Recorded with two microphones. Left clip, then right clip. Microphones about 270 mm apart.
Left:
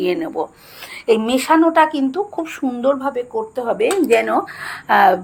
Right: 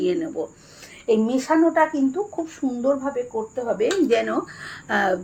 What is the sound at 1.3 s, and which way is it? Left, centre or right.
A woman's voice, centre.